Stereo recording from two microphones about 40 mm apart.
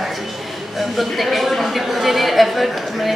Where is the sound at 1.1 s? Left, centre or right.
Centre.